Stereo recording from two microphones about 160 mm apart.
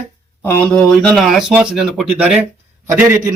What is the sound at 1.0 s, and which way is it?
A man's voice, centre (ahead or behind).